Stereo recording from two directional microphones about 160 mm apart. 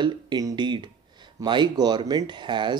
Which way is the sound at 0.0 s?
25° right (ahead or behind).